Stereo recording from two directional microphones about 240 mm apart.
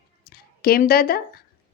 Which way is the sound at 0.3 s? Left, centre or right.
Left.